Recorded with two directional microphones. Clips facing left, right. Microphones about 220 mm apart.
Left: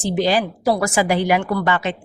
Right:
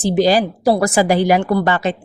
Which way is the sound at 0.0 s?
40° right (ahead or behind).